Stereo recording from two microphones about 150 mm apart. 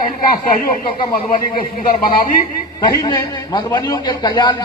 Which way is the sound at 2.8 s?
30° left (ahead or behind).